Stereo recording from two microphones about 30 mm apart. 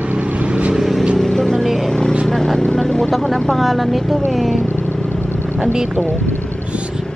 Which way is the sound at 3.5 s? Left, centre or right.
Centre.